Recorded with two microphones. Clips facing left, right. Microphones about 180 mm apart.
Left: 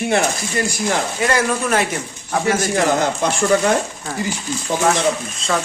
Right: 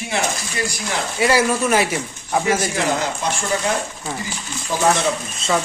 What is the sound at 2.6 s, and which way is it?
Speech, 50° left (ahead or behind).